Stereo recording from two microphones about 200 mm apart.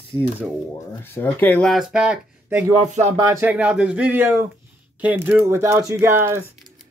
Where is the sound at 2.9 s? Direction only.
35° right (ahead or behind).